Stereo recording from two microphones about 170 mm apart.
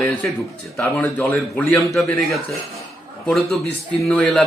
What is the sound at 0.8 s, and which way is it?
Speech, 5° left (ahead or behind).